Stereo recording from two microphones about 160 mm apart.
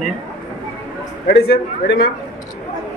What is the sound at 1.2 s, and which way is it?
Speech, 80° left.